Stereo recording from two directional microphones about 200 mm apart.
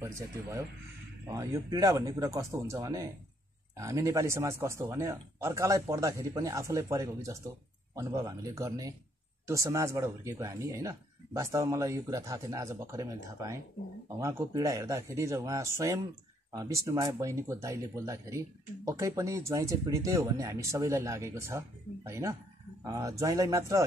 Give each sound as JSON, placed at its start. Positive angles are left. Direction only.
{"t": 0.0, "sound": "speech", "side_deg": -15}